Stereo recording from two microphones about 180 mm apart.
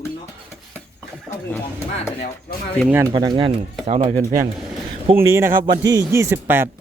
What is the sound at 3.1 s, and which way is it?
Speech, 25° right (ahead or behind).